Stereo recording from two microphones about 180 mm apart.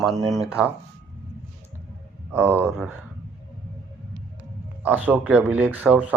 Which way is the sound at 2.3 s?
10° right (ahead or behind).